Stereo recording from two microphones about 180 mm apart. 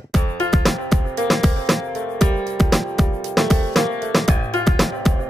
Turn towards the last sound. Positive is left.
turn(degrees=0)  # may be behind; listen again after turning